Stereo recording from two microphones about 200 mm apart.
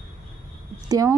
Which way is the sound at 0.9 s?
20° right (ahead or behind).